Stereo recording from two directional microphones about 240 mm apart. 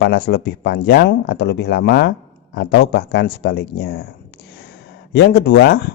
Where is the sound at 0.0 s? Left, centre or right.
Left.